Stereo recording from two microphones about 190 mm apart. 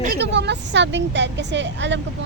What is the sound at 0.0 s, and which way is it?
A woman's voice, 55° right (ahead or behind).